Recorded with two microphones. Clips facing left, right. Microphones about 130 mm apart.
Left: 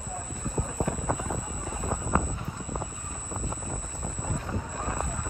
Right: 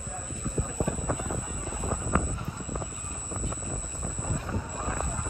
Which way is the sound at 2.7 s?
20° left (ahead or behind).